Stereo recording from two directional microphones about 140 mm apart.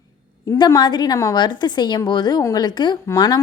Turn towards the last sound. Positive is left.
turn(degrees=25)  # may be behind; listen again after turning